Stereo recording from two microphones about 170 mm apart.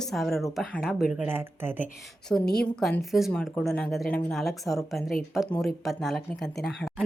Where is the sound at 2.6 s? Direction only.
5° left (ahead or behind).